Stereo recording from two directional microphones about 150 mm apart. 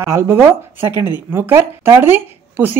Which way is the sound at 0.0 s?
15° right (ahead or behind).